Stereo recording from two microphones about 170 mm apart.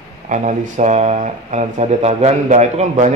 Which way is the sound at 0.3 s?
45° right (ahead or behind).